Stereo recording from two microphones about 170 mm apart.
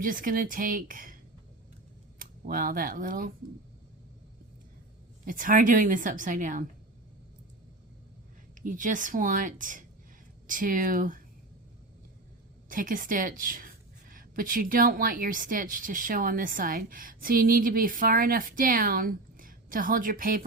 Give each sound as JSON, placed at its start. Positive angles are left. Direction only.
{"t": 0.0, "sound": "a woman's voice", "side_deg": -55}
{"t": 2.1, "sound": "speech", "side_deg": -55}
{"t": 5.2, "sound": "a woman's voice", "side_deg": -55}
{"t": 8.6, "sound": "a woman's voice", "side_deg": -50}
{"t": 12.6, "sound": "a woman's voice", "side_deg": -55}